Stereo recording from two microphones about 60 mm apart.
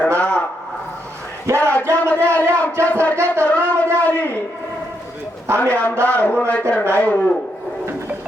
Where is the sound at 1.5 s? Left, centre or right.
Right.